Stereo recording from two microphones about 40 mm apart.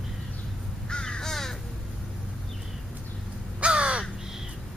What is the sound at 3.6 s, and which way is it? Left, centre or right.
Crow, right.